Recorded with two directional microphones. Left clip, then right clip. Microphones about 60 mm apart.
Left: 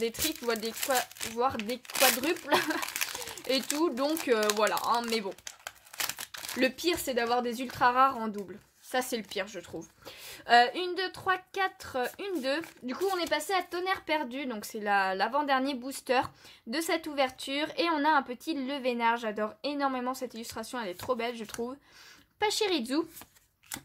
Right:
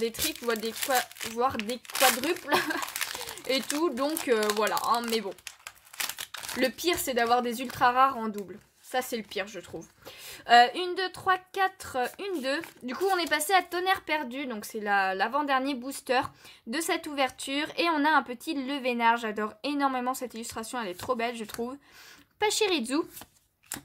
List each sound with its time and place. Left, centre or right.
0.2 s a woman's voice: centre
1.5 s a woman's voice: centre
1.9 s speech: centre
2.4 s speech: centre
5.0 s speech: centre
6.6 s a woman's voice: centre
8.9 s speech: left
9.3 s a woman's voice: centre
9.7 s speech: centre
10.2 s a woman's voice: centre
12.8 s a woman's voice: right
14.0 s a woman's voice: centre
16.7 s speech: centre
22.4 s speech: centre